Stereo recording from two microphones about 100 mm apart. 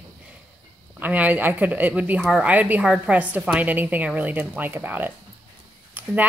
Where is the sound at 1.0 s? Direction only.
15° right (ahead or behind).